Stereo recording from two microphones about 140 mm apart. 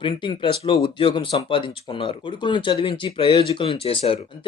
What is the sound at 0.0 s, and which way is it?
Speech, 35° left (ahead or behind).